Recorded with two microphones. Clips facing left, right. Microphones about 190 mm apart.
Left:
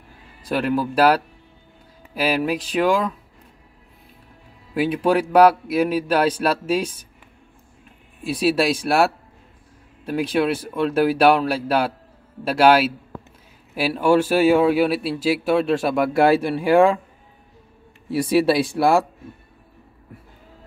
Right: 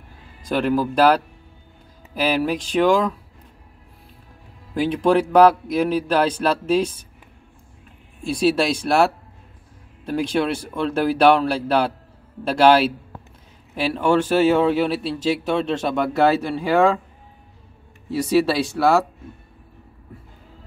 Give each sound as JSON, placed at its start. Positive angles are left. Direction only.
{"t": 0.5, "sound": "speech", "side_deg": 5}
{"t": 4.7, "sound": "speech", "side_deg": 5}
{"t": 8.2, "sound": "a man's voice", "side_deg": 5}
{"t": 18.4, "sound": "a man's voice", "side_deg": 15}